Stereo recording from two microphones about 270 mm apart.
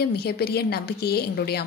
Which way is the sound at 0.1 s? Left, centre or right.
Left.